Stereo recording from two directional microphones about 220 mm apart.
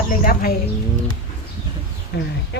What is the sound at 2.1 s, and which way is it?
Speech, 50° left (ahead or behind).